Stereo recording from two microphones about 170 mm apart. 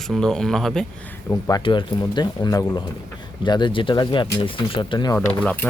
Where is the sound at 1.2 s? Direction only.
15° left (ahead or behind).